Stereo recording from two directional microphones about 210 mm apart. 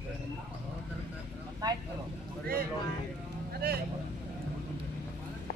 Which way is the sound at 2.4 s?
45° right (ahead or behind).